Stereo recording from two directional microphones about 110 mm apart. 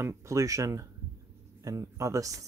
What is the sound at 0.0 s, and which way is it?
Speech, 30° right (ahead or behind).